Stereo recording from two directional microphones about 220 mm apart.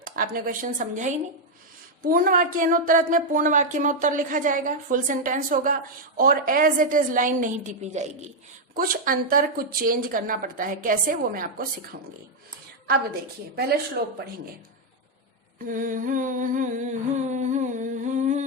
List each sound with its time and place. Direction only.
0.0 s speech: 40° right (ahead or behind)
14.0 s speech: 45° right (ahead or behind)
15.6 s humming: 40° right (ahead or behind)